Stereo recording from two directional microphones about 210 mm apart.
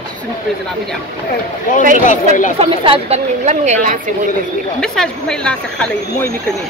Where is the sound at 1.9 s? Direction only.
35° left (ahead or behind).